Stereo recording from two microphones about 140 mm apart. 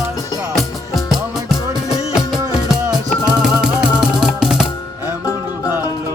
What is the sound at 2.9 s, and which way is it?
Music, 30° right (ahead or behind).